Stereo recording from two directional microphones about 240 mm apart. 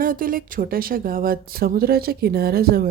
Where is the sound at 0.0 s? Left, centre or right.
Right.